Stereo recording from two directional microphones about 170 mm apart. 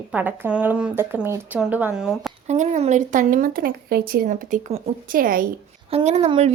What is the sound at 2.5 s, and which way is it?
A woman's voice, 40° right (ahead or behind).